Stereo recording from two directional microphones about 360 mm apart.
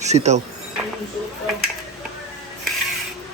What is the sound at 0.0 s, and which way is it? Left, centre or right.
Speech, centre.